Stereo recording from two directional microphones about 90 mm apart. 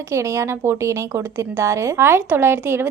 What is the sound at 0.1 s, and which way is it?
A woman's voice, 35° right (ahead or behind).